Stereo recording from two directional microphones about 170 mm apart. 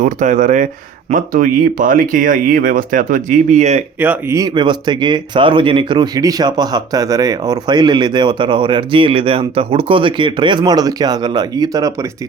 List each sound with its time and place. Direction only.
0.0 s speech: 50° right (ahead or behind)
4.0 s speech: 15° right (ahead or behind)